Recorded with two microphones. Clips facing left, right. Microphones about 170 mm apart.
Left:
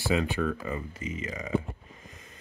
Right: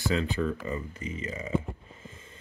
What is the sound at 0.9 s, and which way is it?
Speech, 30° right (ahead or behind).